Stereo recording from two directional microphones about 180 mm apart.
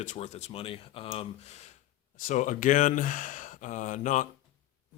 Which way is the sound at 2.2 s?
45° left (ahead or behind).